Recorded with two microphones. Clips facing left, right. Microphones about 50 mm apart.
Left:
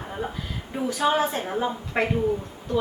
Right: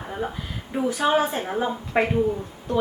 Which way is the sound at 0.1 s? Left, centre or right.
Centre.